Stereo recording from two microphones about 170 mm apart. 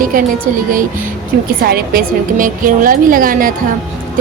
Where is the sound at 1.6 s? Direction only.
60° right (ahead or behind).